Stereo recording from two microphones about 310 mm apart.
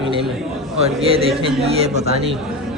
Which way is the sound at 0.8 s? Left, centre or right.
Centre.